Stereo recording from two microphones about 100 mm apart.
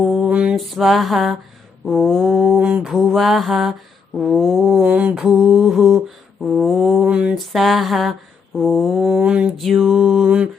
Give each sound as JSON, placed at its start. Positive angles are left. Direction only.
{"t": 0.0, "sound": "mantra", "side_deg": -5}
{"t": 0.5, "sound": "mantra", "side_deg": 0}
{"t": 2.6, "sound": "mantra", "side_deg": -10}
{"t": 4.8, "sound": "mantra", "side_deg": -15}
{"t": 9.2, "sound": "mantra", "side_deg": -10}
{"t": 9.6, "sound": "mantra", "side_deg": 0}
{"t": 10.2, "sound": "mantra", "side_deg": -10}